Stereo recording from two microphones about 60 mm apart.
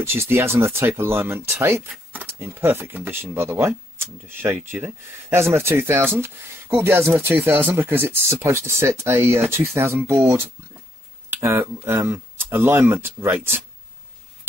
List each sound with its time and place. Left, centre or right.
0.0 s speech: right